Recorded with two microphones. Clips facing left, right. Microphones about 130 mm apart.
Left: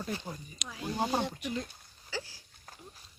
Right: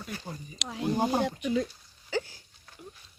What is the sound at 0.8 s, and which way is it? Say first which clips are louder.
Speech: right 5 dB; 20° right (ahead or behind).